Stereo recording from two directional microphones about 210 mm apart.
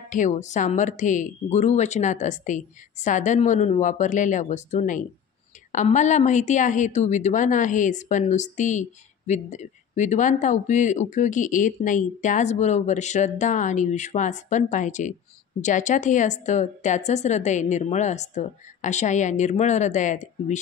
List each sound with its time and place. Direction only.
0.1 s speech: 35° left (ahead or behind)